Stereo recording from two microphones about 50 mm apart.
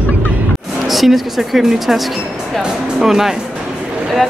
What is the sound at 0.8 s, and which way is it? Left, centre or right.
Speech, centre.